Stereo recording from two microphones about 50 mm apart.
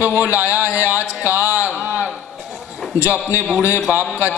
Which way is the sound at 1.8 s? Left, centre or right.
Right.